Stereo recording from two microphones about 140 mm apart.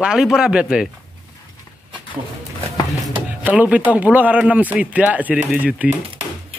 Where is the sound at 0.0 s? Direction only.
5° right (ahead or behind).